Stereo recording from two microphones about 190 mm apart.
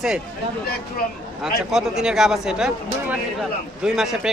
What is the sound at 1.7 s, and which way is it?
Speech, centre (ahead or behind).